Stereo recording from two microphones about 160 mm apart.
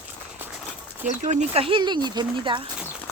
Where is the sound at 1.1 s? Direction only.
50° right (ahead or behind); by 2.6 s 30° right (ahead or behind).